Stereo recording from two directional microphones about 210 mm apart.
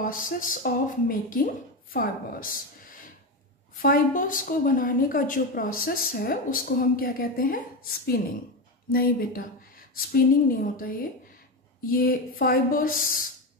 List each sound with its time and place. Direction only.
0.0 s a woman's voice: 40° left (ahead or behind)
8.9 s a woman's voice: 45° left (ahead or behind)